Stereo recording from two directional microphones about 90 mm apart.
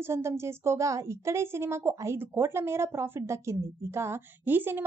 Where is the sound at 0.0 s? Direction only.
30° right (ahead or behind).